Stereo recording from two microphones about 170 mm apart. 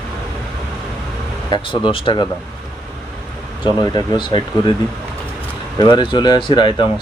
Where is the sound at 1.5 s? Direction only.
30° left (ahead or behind).